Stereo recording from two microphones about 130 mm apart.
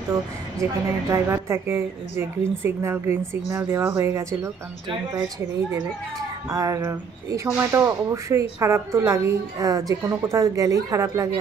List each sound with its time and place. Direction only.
0.1 s speech: 25° right (ahead or behind)
6.5 s speech: 25° right (ahead or behind)